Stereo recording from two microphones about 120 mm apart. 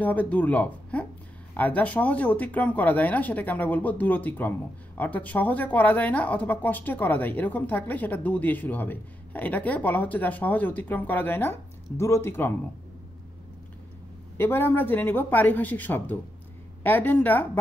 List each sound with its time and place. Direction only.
0.0 s speech: 15° left (ahead or behind)
14.3 s speech: 20° left (ahead or behind)